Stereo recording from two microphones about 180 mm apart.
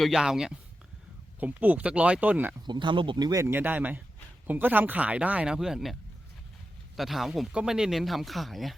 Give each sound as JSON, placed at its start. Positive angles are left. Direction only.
{"t": 0.0, "sound": "speech", "side_deg": -5}
{"t": 2.6, "sound": "speech", "side_deg": -25}